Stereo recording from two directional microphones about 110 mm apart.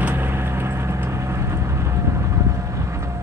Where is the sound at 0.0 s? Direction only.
20° right (ahead or behind).